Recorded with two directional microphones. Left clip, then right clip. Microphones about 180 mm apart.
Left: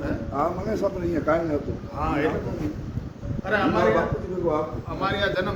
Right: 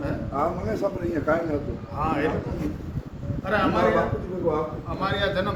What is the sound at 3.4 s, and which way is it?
A man's voice, centre (ahead or behind).